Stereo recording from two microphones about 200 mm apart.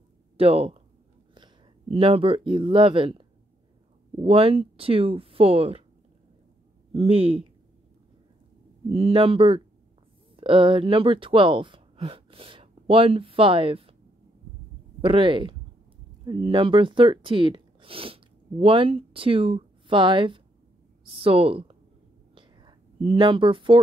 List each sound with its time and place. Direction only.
0.4 s speech: 30° right (ahead or behind)
6.9 s speech: 30° right (ahead or behind)
8.9 s speech: 30° right (ahead or behind)
15.0 s speech: 25° right (ahead or behind)
22.3 s whispering: 25° right (ahead or behind)